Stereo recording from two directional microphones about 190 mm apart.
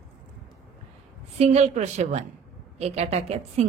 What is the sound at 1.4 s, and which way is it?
Speech, 35° right (ahead or behind).